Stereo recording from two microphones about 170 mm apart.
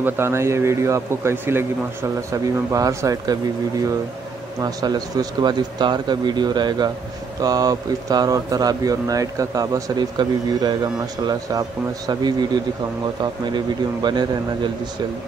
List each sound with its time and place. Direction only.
0.0 s a man's voice: 15° right (ahead or behind)
4.6 s speech: 20° right (ahead or behind)
12.1 s speech: 25° right (ahead or behind)
14.0 s speech: 25° right (ahead or behind)